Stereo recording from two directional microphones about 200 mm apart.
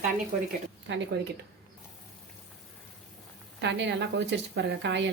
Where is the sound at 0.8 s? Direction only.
65° right (ahead or behind).